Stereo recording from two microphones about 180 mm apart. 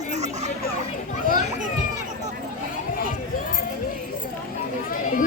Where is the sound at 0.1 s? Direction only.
40° right (ahead or behind).